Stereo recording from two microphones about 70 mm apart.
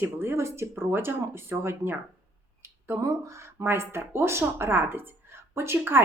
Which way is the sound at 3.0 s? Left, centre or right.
Right.